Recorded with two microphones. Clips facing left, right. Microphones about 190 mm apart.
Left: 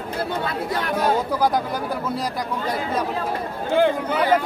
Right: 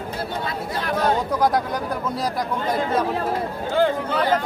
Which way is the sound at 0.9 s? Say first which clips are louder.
Right 1 dB; 5° left (ahead or behind).